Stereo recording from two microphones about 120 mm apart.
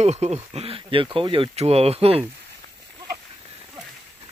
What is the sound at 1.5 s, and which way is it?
Speech, 60° right (ahead or behind).